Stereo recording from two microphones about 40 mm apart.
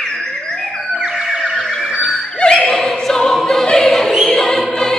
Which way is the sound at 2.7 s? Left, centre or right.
Centre.